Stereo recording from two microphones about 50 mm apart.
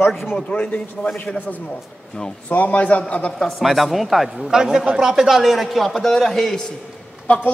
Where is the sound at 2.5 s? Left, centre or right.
Left.